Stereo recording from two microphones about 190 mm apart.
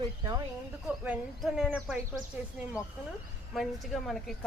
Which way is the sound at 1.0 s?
5° right (ahead or behind).